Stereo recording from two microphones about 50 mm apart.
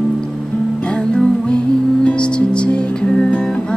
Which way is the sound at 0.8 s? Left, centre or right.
Centre.